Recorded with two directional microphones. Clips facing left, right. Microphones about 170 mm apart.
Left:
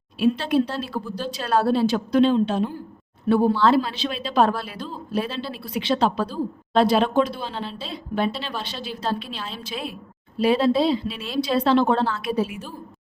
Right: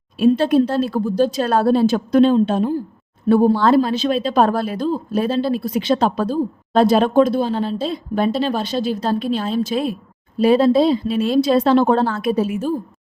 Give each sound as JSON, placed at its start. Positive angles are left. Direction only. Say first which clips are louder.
{"t": 0.2, "sound": "speech", "louder": "right 6 dB", "side_deg": -45}